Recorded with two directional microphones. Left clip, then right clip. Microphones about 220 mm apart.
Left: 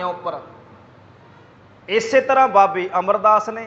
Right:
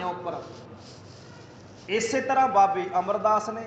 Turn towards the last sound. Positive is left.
turn(degrees=35)  # may be behind; listen again after turning